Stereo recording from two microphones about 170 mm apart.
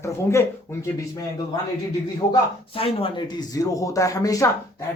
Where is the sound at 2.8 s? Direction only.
35° left (ahead or behind).